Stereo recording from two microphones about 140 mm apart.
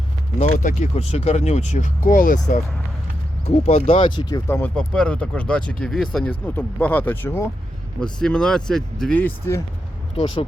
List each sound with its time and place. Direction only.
0.3 s speech: 65° left (ahead or behind)
3.4 s speech: 50° left (ahead or behind); by 4.7 s 20° left (ahead or behind)
4.7 s speech: 5° left (ahead or behind)
8.0 s speech: 5° left (ahead or behind)
10.2 s speech: 40° left (ahead or behind)